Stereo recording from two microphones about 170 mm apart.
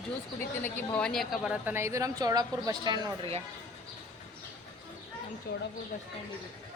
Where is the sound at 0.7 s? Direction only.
10° left (ahead or behind); by 3.3 s 25° right (ahead or behind).